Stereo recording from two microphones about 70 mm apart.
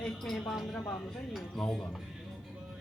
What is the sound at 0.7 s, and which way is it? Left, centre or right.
Speech, left.